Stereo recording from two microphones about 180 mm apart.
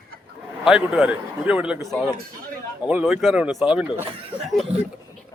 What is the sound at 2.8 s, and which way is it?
A man's voice, 5° right (ahead or behind).